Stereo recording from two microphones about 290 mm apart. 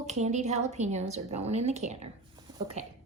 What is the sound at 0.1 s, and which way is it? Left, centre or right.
A woman's voice, right.